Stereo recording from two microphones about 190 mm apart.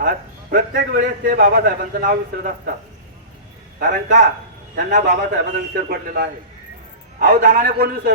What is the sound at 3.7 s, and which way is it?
A man's voice, 45° right (ahead or behind).